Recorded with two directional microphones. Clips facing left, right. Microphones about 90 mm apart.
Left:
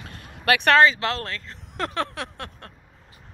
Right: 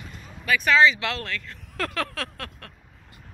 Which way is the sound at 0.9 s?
35° left (ahead or behind).